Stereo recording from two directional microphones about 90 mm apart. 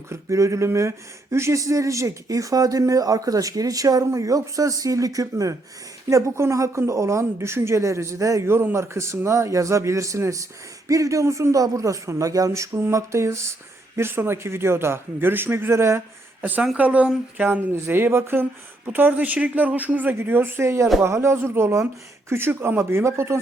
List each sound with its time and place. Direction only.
0.1 s speech: 35° right (ahead or behind)
16.4 s speech: 15° right (ahead or behind)